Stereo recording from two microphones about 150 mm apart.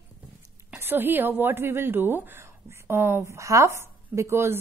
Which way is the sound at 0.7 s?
15° right (ahead or behind).